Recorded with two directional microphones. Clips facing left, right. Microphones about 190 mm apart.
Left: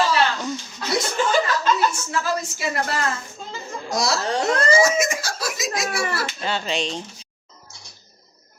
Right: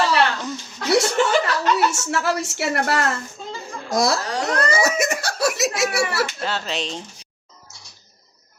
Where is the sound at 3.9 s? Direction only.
55° right (ahead or behind).